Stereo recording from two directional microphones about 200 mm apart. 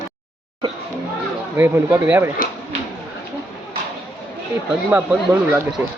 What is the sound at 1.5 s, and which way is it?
Speech, 10° right (ahead or behind).